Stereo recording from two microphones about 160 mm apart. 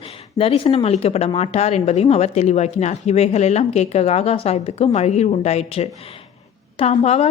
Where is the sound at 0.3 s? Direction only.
35° left (ahead or behind).